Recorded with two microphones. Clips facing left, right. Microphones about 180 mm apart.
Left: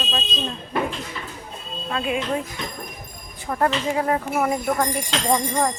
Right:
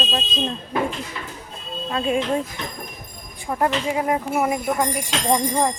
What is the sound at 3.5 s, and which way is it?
Speech, 15° right (ahead or behind).